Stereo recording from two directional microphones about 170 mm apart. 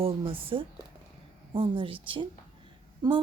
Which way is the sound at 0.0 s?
35° right (ahead or behind).